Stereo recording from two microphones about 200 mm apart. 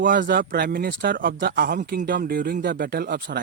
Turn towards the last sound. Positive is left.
turn(degrees=-55)  # may be behind; listen again after turning